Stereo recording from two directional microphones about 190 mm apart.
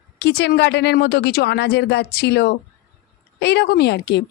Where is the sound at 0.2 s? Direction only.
60° left (ahead or behind).